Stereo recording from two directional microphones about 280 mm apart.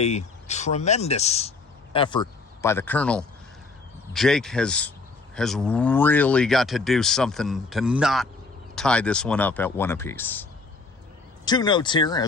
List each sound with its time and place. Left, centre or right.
0.0 s speech: left; by 10.4 s centre
11.4 s speech: centre